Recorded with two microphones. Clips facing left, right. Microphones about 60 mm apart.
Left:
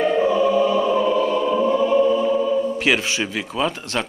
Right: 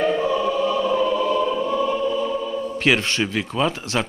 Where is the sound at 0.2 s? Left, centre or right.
Left.